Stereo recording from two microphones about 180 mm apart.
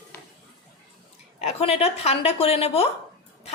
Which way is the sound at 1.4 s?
35° left (ahead or behind).